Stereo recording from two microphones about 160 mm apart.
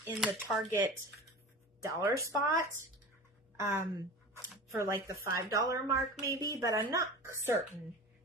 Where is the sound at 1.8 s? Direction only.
15° right (ahead or behind).